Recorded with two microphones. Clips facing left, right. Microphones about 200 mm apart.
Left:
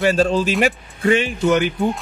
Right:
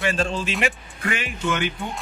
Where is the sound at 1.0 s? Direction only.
25° left (ahead or behind).